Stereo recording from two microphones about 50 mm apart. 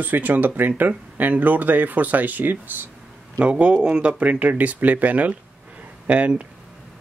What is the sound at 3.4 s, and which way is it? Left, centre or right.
Speech, right.